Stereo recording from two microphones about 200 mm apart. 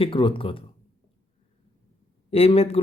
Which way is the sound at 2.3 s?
30° left (ahead or behind).